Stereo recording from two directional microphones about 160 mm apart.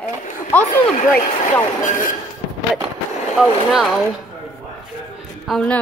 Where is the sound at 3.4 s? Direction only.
Centre (ahead or behind).